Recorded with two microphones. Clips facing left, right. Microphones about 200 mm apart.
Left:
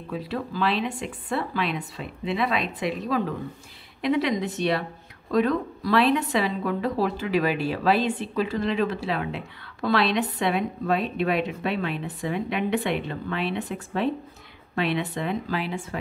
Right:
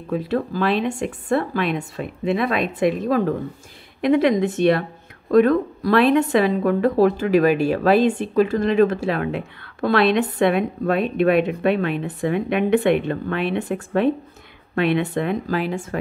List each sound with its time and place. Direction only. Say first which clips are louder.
0.1 s speech: right 8 dB; 50° right (ahead or behind)